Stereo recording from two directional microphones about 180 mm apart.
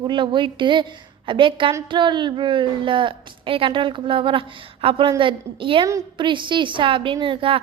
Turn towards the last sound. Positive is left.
turn(degrees=-30)  # may be behind; listen again after turning